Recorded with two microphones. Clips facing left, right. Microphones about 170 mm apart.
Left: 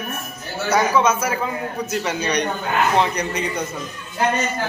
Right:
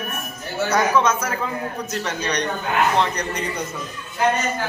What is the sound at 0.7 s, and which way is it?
A man's voice, 5° left (ahead or behind).